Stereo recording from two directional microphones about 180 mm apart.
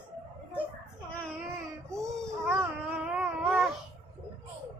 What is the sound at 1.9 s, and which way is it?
Babbling, 15° right (ahead or behind).